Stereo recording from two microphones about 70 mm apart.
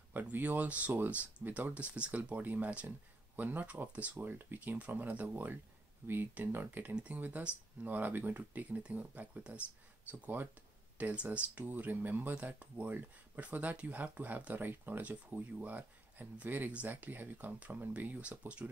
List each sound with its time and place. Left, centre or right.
0.1 s speech: right
10.2 s speech: right